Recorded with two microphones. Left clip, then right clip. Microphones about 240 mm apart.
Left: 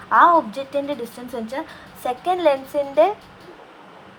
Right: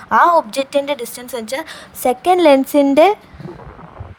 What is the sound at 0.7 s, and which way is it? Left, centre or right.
A woman's voice, right.